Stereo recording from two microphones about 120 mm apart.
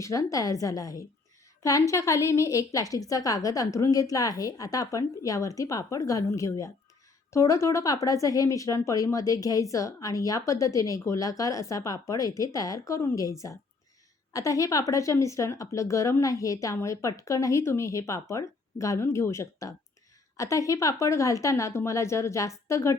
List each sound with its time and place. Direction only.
0.0 s speech: 25° left (ahead or behind)
14.3 s speech: 30° left (ahead or behind)